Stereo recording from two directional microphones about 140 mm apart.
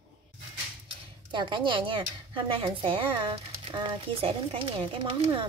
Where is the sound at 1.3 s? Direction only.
35° right (ahead or behind).